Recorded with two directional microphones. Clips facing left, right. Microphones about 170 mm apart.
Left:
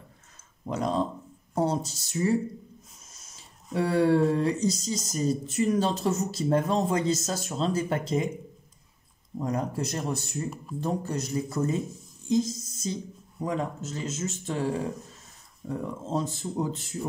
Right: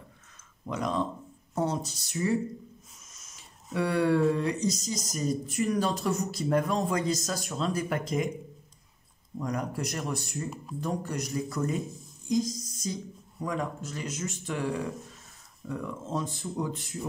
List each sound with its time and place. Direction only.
0.7 s speech: 30° left (ahead or behind)
9.4 s speech: 25° left (ahead or behind)
12.3 s a sound: 25° left (ahead or behind)
13.4 s speech: 25° left (ahead or behind)